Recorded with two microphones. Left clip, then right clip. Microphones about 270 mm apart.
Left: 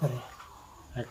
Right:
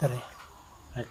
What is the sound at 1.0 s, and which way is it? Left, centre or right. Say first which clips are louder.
Speech: even; centre.